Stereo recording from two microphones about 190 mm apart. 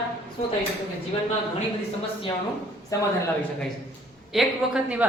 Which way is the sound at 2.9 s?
15° left (ahead or behind).